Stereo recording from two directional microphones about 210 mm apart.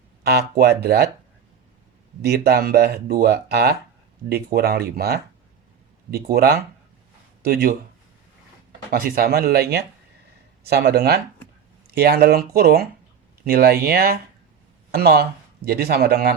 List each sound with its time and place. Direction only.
0.2 s speech: 50° right (ahead or behind)
2.2 s speech: 50° right (ahead or behind)
8.9 s speech: 45° right (ahead or behind)